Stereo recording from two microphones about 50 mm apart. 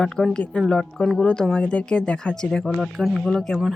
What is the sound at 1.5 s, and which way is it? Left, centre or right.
Speech, left.